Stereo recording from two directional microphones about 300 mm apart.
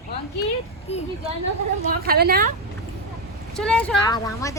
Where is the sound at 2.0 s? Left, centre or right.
Right.